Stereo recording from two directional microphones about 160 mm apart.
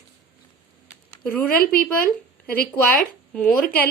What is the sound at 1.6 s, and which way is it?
A woman's voice, 70° left (ahead or behind).